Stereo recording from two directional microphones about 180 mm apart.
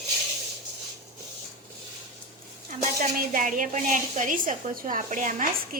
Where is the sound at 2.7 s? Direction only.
45° right (ahead or behind).